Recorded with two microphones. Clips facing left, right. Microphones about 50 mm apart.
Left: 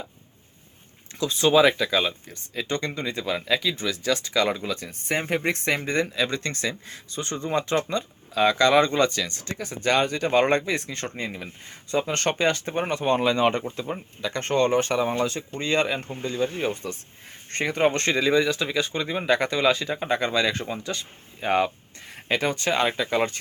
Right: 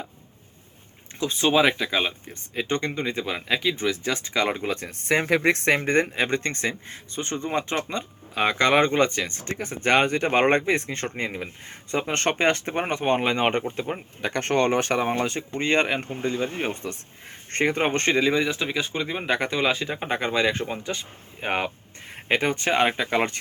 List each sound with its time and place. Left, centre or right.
1.2 s speech: right
18.3 s speech: centre; by 23.4 s right